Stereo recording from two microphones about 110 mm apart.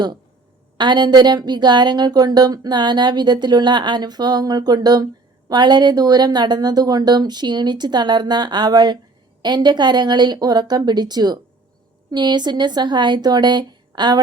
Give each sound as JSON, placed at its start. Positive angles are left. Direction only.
{"t": 0.8, "sound": "speech", "side_deg": -45}